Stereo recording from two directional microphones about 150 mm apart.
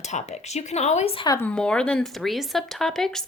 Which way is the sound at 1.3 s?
15° left (ahead or behind).